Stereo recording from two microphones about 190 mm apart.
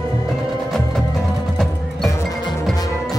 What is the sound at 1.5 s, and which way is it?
Music, centre (ahead or behind).